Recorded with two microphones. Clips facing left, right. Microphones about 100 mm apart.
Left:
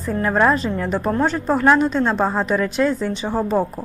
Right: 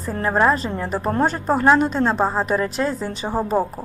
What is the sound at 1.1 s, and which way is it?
Speech, 45° right (ahead or behind).